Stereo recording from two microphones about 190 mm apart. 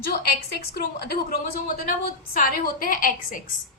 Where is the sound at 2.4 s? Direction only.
45° left (ahead or behind).